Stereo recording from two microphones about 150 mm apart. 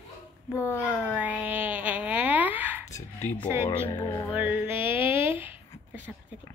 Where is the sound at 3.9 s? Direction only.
30° left (ahead or behind).